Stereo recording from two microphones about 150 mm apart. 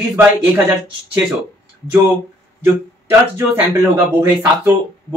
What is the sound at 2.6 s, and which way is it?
Speech, 15° right (ahead or behind).